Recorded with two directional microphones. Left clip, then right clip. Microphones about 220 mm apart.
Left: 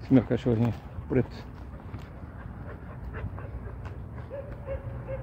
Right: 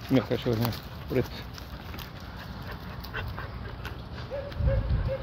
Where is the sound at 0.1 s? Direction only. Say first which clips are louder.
Left 2 dB; 30° left (ahead or behind).